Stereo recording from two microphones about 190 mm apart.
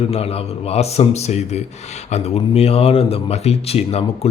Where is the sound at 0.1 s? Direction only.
30° left (ahead or behind).